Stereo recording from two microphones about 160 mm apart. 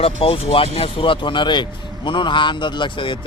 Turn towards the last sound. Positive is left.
turn(degrees=30)  # may be behind; listen again after turning